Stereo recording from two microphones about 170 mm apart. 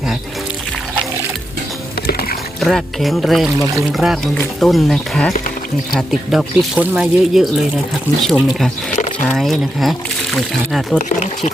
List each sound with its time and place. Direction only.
2.6 s speech: centre (ahead or behind)
10.9 s speech: 50° left (ahead or behind)